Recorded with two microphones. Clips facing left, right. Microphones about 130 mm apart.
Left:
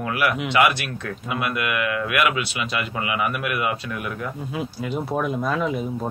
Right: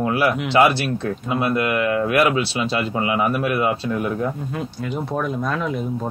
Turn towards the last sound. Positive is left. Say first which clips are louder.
# even
turn(degrees=5)  # may be behind; listen again after turning